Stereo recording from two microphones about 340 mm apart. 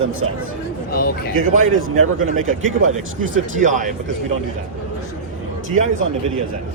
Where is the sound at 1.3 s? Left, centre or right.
Right.